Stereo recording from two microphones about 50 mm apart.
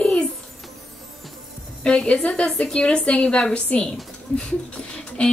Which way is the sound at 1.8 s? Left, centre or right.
Left.